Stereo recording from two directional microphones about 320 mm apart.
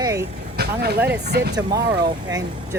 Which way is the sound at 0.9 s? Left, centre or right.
Centre.